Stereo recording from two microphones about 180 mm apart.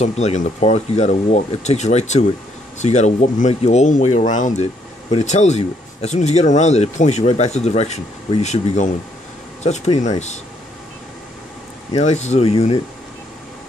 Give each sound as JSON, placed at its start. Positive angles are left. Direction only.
{"t": 0.0, "sound": "speech", "side_deg": 40}
{"t": 11.9, "sound": "speech", "side_deg": 40}